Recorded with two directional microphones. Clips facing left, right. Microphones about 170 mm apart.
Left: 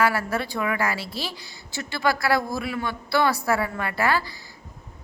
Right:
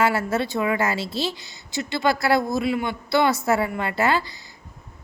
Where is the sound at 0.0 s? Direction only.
25° right (ahead or behind).